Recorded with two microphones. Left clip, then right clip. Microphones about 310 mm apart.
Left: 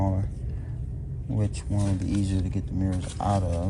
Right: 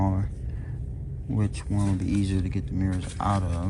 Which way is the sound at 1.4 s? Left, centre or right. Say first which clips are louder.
Right 1 dB; centre.